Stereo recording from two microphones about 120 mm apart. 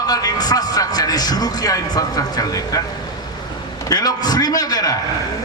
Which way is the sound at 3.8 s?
30° left (ahead or behind).